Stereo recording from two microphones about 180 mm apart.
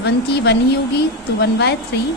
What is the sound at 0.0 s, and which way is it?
A woman's voice, 70° left (ahead or behind).